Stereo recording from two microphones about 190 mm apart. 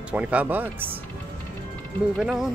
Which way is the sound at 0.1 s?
5° right (ahead or behind).